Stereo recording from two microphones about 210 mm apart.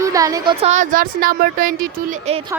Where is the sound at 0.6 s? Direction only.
35° right (ahead or behind).